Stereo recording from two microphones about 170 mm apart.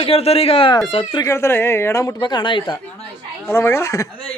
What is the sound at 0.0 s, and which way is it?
Speech, 35° left (ahead or behind).